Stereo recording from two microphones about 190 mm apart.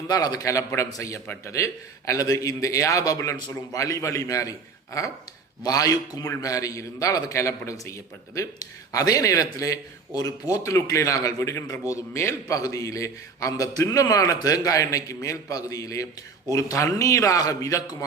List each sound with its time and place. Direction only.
0.1 s a man's voice: 20° left (ahead or behind)